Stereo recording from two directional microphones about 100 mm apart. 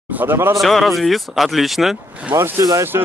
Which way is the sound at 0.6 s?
Centre (ahead or behind).